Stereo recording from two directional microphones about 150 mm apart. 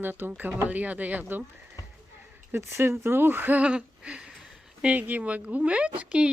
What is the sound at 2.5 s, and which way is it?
Speech, 15° right (ahead or behind).